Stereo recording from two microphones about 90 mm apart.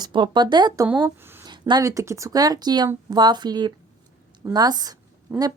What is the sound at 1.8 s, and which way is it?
Speech, 35° right (ahead or behind).